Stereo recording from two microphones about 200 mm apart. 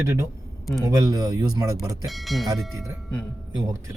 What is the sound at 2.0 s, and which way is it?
Speech, centre (ahead or behind).